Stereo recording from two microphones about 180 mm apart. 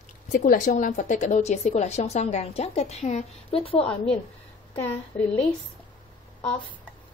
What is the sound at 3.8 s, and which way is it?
Speech, 5° left (ahead or behind).